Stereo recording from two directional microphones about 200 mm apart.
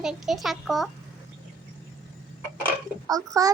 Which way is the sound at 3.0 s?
20° right (ahead or behind).